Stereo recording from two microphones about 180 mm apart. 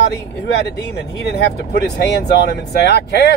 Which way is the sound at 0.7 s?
65° left (ahead or behind).